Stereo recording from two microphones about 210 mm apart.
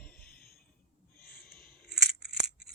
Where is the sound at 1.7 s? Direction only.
Centre (ahead or behind).